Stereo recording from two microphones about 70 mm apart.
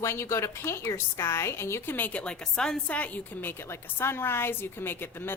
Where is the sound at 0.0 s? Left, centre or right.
Left.